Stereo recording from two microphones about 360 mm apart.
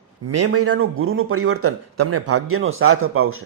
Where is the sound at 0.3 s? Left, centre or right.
Right.